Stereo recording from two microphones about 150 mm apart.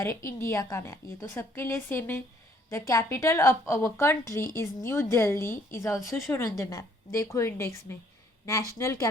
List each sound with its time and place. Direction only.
0.5 s a woman's voice: 20° left (ahead or behind)